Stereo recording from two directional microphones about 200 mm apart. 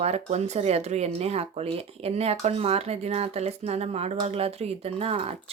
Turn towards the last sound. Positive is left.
turn(degrees=-30)  # may be behind; listen again after turning